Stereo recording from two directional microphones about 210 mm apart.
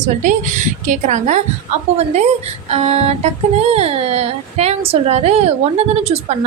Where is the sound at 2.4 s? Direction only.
30° right (ahead or behind).